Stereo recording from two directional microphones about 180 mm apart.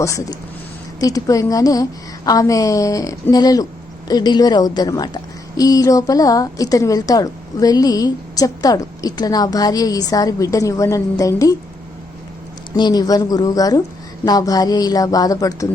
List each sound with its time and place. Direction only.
0.0 s a woman's voice: 20° left (ahead or behind)
12.7 s a woman's voice: 25° left (ahead or behind)